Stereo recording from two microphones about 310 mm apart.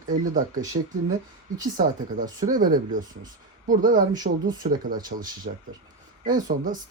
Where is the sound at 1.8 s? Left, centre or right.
Right.